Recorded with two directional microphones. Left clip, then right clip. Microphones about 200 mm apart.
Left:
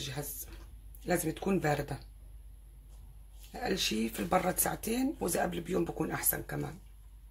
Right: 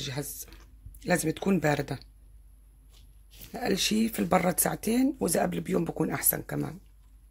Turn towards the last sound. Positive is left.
turn(degrees=-45)  # may be behind; listen again after turning